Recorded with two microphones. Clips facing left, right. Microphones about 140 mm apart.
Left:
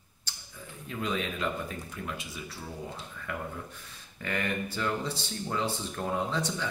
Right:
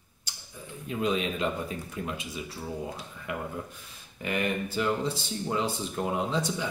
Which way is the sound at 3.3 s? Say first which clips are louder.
Right 3 dB; 15° right (ahead or behind).